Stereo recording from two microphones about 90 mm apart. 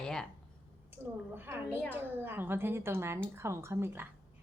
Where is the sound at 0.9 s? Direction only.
25° right (ahead or behind).